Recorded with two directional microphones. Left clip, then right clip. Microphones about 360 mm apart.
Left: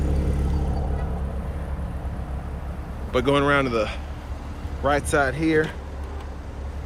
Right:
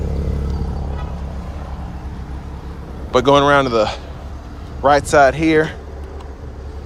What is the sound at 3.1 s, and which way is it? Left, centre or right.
Speech, centre.